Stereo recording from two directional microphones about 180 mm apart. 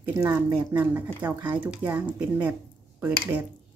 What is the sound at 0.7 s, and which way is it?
Speech, 10° right (ahead or behind).